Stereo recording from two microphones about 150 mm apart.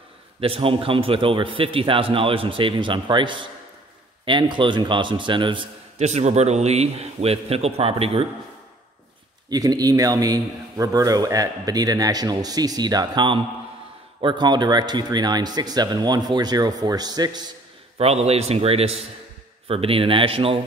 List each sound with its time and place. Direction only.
0.4 s a man's voice: 40° right (ahead or behind)
5.9 s a man's voice: 45° right (ahead or behind)
9.5 s a man's voice: 25° right (ahead or behind)
17.9 s a man's voice: 45° right (ahead or behind)